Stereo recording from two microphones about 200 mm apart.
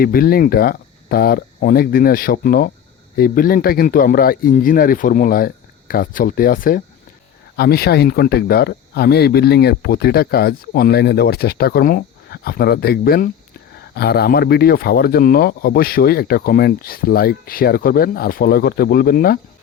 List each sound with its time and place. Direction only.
0.0 s speech: 50° left (ahead or behind)